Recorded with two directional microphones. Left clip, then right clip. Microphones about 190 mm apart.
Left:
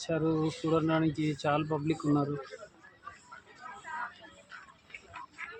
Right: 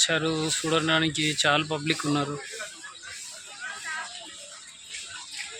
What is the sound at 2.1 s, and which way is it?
Speech, 25° right (ahead or behind).